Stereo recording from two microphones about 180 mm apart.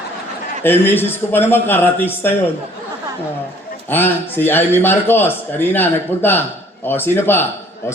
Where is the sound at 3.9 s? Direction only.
10° left (ahead or behind).